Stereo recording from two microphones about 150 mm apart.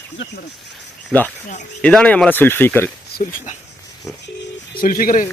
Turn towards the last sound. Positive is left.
turn(degrees=65)  # may be behind; listen again after turning